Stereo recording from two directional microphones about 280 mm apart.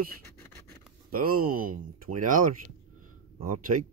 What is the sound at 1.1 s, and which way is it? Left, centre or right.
Speech, right.